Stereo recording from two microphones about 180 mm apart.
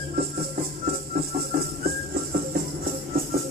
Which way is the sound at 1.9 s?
55° right (ahead or behind).